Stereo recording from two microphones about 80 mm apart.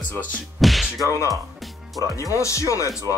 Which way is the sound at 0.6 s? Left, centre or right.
Centre.